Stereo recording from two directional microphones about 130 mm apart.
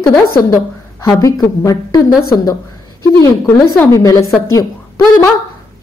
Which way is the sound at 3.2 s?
20° left (ahead or behind).